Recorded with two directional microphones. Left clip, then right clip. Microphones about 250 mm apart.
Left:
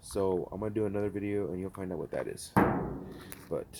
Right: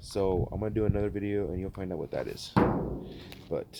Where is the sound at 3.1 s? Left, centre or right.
Centre.